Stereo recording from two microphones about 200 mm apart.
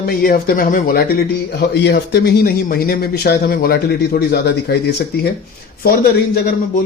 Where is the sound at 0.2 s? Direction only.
45° left (ahead or behind).